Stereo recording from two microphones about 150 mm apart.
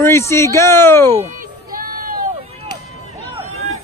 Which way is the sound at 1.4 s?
70° right (ahead or behind).